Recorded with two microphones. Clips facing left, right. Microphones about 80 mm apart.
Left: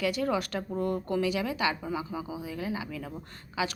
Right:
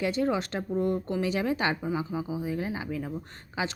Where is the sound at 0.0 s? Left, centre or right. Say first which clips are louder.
Right 1 dB; right.